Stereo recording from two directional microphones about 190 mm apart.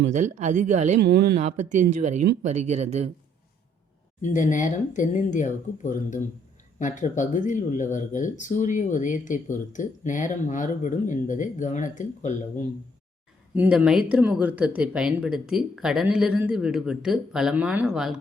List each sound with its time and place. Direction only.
0.0 s speech: 40° right (ahead or behind)
0.9 s speech: 60° right (ahead or behind)
1.4 s speech: 35° right (ahead or behind)
4.2 s speech: 40° left (ahead or behind)
13.6 s speech: 5° right (ahead or behind)